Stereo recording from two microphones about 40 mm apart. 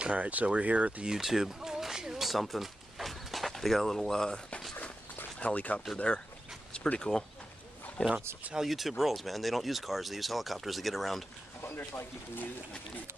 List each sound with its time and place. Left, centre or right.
0.0 s speech: right
1.0 s speech: centre
2.2 s a sound: centre
4.0 s speech: centre
5.4 s speech: left
5.9 s speech: left
7.0 s speech: centre
8.0 s speech: left
8.6 s speech: centre
11.9 s speech: left